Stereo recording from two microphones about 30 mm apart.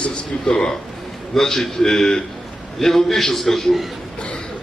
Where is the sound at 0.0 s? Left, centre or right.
Left.